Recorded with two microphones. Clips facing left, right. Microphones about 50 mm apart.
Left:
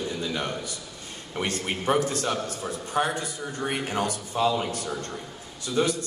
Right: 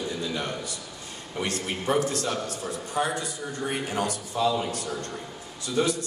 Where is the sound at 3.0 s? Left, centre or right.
Left.